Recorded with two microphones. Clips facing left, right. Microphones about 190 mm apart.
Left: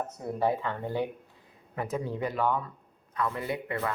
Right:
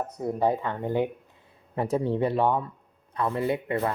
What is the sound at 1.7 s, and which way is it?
Speech, 30° right (ahead or behind).